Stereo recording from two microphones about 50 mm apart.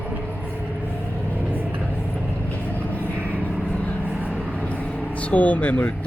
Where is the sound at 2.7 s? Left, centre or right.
Left.